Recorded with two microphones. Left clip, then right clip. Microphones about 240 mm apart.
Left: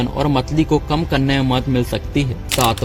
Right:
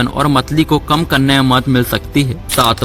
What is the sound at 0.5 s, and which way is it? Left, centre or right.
A man's voice, right.